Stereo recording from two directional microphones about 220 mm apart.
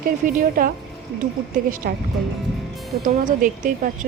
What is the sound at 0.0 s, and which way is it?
A woman's voice, 40° right (ahead or behind).